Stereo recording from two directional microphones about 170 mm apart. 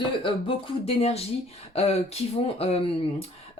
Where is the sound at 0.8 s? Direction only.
35° left (ahead or behind).